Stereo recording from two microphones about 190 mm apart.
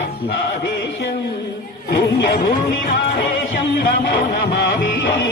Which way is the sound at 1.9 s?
60° left (ahead or behind).